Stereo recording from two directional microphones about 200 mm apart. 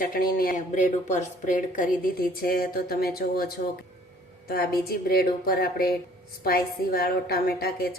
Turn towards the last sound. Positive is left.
turn(degrees=50)  # may be behind; listen again after turning